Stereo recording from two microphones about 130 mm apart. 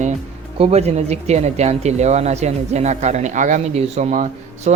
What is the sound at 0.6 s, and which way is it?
Speech, 55° right (ahead or behind).